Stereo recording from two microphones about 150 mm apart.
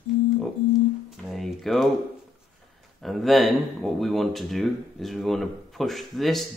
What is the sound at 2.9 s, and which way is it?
Speech, centre (ahead or behind).